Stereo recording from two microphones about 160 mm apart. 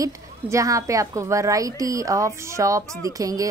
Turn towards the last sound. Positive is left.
turn(degrees=-20)  # may be behind; listen again after turning